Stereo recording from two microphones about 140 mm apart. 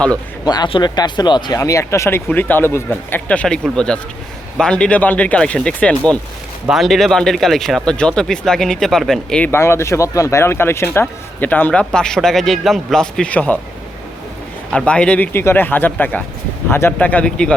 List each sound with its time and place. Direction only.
0.4 s speech: 30° left (ahead or behind); by 9.5 s 5° left (ahead or behind)
9.5 s speech: 20° left (ahead or behind)
14.7 s speech: 5° left (ahead or behind)